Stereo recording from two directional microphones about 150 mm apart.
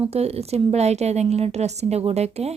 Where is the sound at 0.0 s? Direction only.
45° right (ahead or behind).